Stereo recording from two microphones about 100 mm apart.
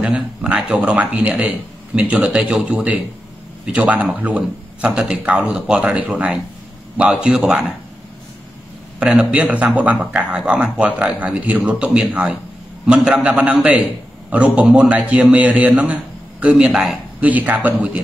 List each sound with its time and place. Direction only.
0.0 s a man's voice: 10° right (ahead or behind)
9.0 s a man's voice: 15° right (ahead or behind)
17.2 s a man's voice: 15° right (ahead or behind)